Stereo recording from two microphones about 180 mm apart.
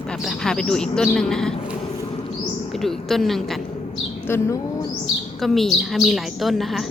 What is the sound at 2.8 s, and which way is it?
Speech, centre (ahead or behind).